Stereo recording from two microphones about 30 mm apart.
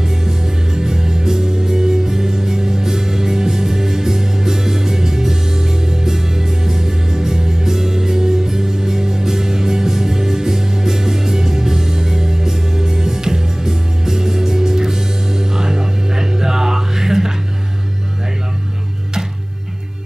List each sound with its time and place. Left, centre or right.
0.0 s music: centre